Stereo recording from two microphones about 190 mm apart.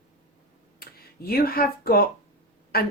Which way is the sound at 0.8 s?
55° left (ahead or behind).